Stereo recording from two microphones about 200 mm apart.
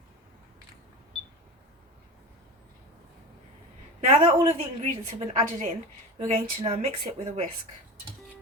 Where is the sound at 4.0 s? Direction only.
30° right (ahead or behind).